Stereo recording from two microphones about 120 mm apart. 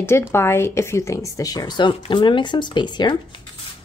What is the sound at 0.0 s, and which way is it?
Speech, 20° left (ahead or behind).